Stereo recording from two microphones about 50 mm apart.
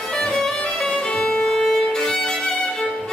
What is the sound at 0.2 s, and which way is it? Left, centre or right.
Music, centre.